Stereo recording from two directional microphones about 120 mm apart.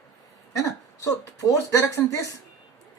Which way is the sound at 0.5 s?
25° left (ahead or behind).